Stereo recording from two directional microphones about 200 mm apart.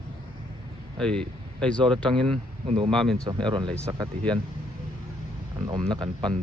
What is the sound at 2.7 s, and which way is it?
Speech, 25° right (ahead or behind).